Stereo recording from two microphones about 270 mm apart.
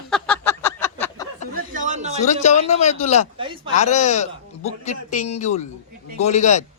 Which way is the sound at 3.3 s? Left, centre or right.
Centre.